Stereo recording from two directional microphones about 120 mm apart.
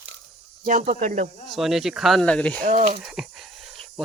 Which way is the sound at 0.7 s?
90° right.